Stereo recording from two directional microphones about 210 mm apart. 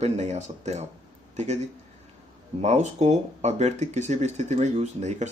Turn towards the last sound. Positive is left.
turn(degrees=-35)  # may be behind; listen again after turning